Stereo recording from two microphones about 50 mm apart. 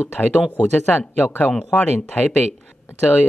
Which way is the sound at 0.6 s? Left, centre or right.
Left.